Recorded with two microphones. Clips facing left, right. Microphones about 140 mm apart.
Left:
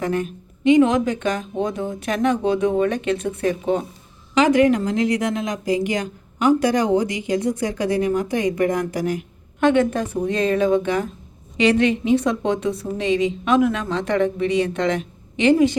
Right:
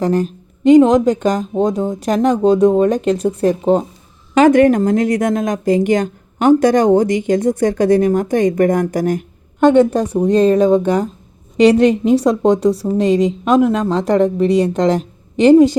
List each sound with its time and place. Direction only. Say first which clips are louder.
0.0 s speech: right 7 dB; 35° right (ahead or behind)
4.4 s a woman's voice: right 6 dB; 50° right (ahead or behind)